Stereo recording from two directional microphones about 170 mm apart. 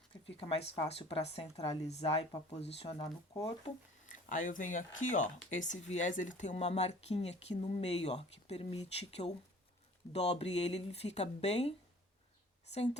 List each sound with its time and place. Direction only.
0.3 s speech: 35° left (ahead or behind)
4.1 s speech: 50° left (ahead or behind)
12.7 s speech: 40° left (ahead or behind)